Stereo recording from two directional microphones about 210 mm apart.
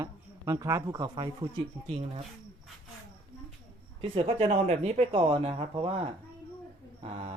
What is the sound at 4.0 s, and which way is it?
Speech, 25° right (ahead or behind).